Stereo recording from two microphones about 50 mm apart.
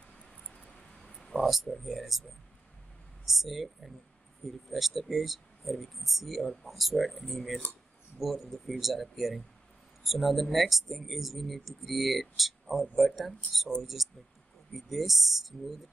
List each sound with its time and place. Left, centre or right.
0.5 s a sound: centre
1.3 s speech: centre
3.3 s speech: centre
14.7 s speech: centre